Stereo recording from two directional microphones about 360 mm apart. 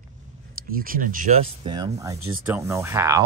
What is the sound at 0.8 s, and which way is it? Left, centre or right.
Speech, right.